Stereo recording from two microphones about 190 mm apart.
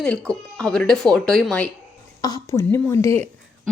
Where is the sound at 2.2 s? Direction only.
20° left (ahead or behind).